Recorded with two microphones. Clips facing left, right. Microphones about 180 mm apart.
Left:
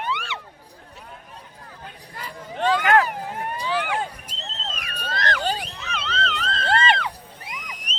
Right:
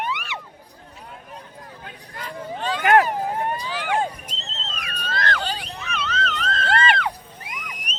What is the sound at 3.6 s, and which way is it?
Vehicle, 65° left (ahead or behind).